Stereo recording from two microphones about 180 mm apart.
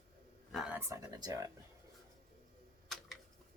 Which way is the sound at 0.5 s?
Centre (ahead or behind).